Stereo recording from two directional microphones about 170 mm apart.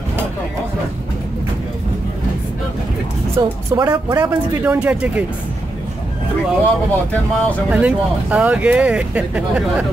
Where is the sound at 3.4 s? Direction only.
20° right (ahead or behind).